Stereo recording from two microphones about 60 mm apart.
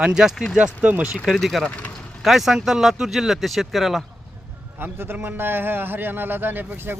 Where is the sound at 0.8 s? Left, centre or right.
Right.